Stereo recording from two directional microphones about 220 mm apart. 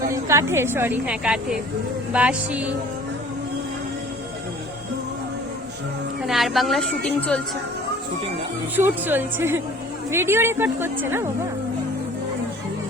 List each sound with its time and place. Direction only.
0.1 s a woman's voice: 15° right (ahead or behind)
6.2 s a woman's voice: centre (ahead or behind)
8.7 s speech: 10° right (ahead or behind)